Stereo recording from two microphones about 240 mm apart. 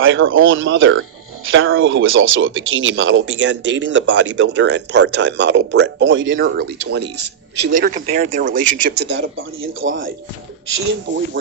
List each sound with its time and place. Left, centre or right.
0.0 s speech: right
6.6 s speech: right